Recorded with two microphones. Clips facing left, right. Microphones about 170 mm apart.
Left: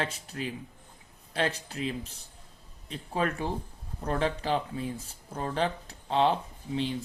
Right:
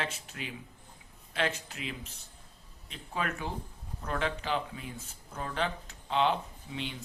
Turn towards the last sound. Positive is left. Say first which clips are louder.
# left 8 dB
turn(degrees=35)  # may be behind; listen again after turning